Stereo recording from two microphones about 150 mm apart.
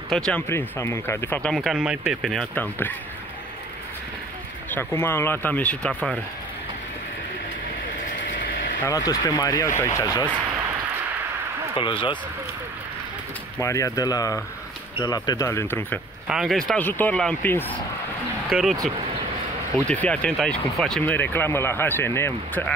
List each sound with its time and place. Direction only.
0.1 s speech: 5° left (ahead or behind)
0.5 s speech: 15° left (ahead or behind)
1.5 s speech: centre (ahead or behind)
2.5 s speech: 10° left (ahead or behind)
4.6 s speech: 15° left (ahead or behind)
8.8 s speech: 25° left (ahead or behind)
11.7 s speech: 35° left (ahead or behind)
13.6 s speech: 20° left (ahead or behind)
16.3 s speech: centre (ahead or behind)
18.5 s speech: centre (ahead or behind)
19.9 s speech: 10° left (ahead or behind)